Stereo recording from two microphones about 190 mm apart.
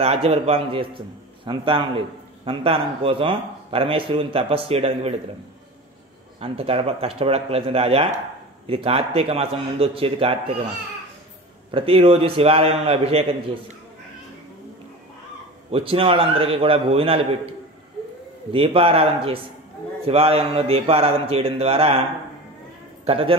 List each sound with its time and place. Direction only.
0.0 s a man's voice: 30° right (ahead or behind)
6.4 s a man's voice: 30° right (ahead or behind)
11.7 s a man's voice: 30° right (ahead or behind)
15.7 s a man's voice: 30° right (ahead or behind)
23.0 s speech: 30° right (ahead or behind)